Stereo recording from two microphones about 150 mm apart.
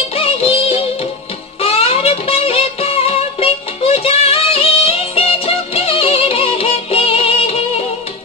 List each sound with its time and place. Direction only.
0.1 s music: 40° left (ahead or behind)